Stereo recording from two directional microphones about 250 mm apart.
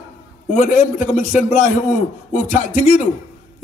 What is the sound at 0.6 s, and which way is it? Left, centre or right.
Speech, left.